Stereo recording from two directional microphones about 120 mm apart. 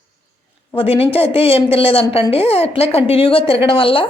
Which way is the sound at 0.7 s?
55° left (ahead or behind).